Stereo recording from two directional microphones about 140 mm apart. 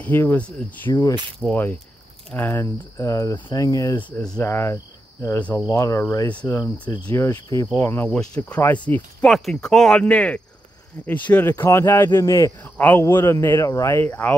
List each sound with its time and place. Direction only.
0.0 s speech: 15° left (ahead or behind)
2.6 s speech: 25° left (ahead or behind)
3.3 s speech: 35° left (ahead or behind)
3.6 s speech: 25° left (ahead or behind)
4.2 s speech: 5° left (ahead or behind)
4.5 s speech: 20° left (ahead or behind)